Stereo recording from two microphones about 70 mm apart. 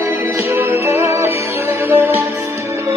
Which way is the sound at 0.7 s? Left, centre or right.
Right.